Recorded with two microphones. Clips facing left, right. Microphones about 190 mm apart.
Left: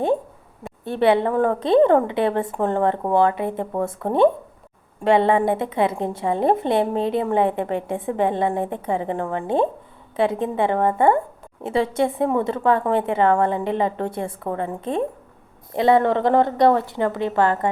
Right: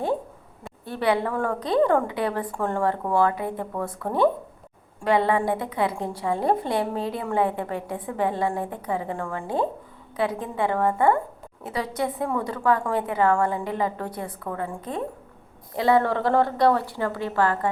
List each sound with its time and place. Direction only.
0.9 s a woman's voice: 25° left (ahead or behind)